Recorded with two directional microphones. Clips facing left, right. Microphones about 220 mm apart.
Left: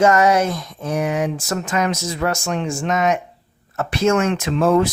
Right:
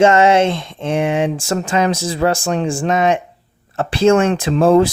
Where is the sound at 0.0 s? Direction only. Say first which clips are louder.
Right 4 dB; 25° right (ahead or behind).